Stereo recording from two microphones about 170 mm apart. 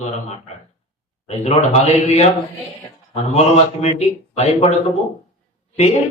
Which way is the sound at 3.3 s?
40° left (ahead or behind).